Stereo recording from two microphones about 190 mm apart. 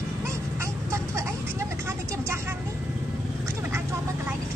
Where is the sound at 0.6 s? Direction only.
15° right (ahead or behind).